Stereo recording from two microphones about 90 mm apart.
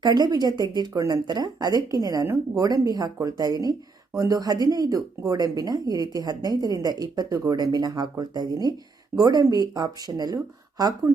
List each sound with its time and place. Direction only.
0.0 s speech: 50° right (ahead or behind)
2.2 s speech: 30° right (ahead or behind)
2.6 s speech: 40° right (ahead or behind)
7.5 s speech: 50° right (ahead or behind)